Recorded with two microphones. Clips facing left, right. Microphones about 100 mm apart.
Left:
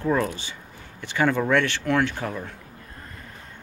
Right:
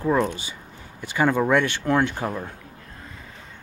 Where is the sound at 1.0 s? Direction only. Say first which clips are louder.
Right 2 dB; 10° right (ahead or behind).